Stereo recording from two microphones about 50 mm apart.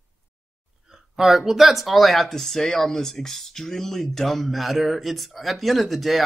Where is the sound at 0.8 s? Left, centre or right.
Centre.